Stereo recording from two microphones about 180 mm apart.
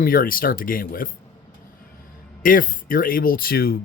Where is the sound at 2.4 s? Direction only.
50° left (ahead or behind).